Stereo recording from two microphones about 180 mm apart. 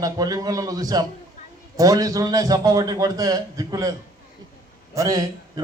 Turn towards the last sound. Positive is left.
turn(degrees=-20)  # may be behind; listen again after turning